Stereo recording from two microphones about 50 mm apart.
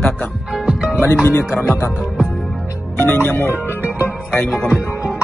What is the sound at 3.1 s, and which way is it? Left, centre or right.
Speech, left.